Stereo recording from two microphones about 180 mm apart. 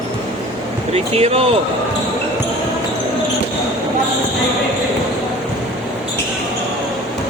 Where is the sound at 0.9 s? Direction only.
35° right (ahead or behind).